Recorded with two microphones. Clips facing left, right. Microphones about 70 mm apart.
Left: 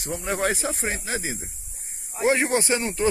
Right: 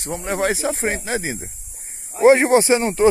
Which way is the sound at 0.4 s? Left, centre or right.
Right.